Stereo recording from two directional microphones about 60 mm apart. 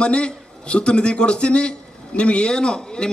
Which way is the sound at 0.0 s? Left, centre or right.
Centre.